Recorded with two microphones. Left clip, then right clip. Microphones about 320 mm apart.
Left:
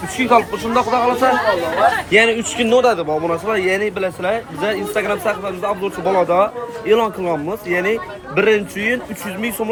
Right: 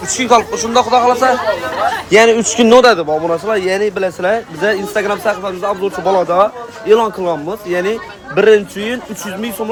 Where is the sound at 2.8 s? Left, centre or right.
Right.